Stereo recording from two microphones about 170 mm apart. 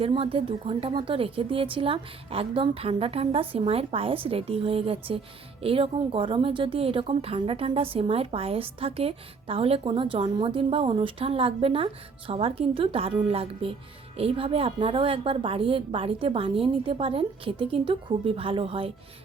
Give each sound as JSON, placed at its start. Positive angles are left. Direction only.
{"t": 0.0, "sound": "a woman's voice", "side_deg": -35}